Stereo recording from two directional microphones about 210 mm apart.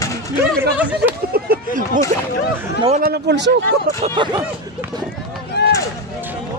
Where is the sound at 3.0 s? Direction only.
50° right (ahead or behind).